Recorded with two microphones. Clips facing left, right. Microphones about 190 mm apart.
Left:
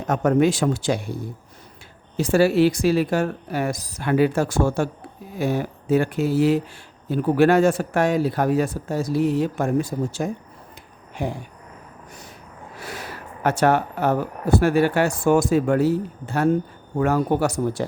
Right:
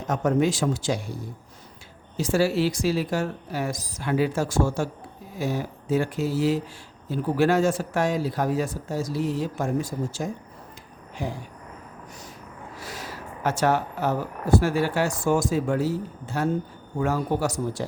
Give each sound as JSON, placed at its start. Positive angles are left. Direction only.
{"t": 0.1, "sound": "speech", "side_deg": 65}
{"t": 2.1, "sound": "speech", "side_deg": 60}
{"t": 12.8, "sound": "speech", "side_deg": 60}